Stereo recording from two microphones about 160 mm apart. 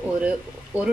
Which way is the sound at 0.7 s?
20° left (ahead or behind).